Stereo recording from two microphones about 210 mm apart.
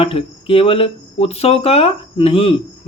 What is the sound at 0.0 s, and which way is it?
Speech, 25° left (ahead or behind).